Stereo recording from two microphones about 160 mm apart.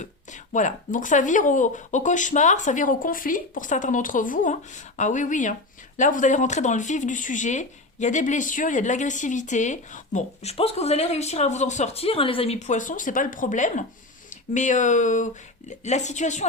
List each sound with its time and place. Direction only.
0.0 s speech: 50° left (ahead or behind)